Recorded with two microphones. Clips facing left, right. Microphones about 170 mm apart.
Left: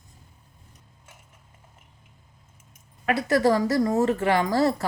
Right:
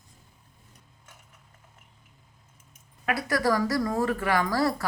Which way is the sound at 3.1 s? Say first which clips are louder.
Left 5 dB; 25° left (ahead or behind).